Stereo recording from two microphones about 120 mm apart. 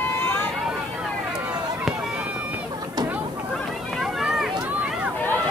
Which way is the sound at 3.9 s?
Centre (ahead or behind).